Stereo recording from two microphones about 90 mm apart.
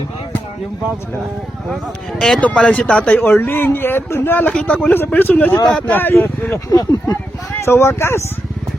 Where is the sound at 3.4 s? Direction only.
25° left (ahead or behind).